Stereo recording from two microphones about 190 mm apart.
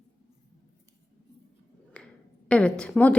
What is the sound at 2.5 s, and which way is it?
Speech, 5° left (ahead or behind).